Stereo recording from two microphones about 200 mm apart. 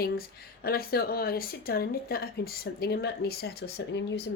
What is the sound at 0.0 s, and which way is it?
Speech, 50° left (ahead or behind).